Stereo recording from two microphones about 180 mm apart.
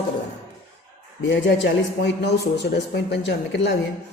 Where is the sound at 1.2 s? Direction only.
75° left (ahead or behind).